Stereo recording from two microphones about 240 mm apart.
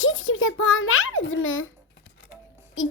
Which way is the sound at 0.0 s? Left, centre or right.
Left.